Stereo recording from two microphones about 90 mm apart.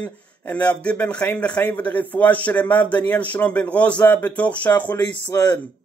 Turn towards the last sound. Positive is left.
turn(degrees=45)  # may be behind; listen again after turning